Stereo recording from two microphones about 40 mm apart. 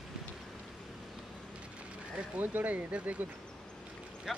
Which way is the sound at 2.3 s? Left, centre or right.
Right.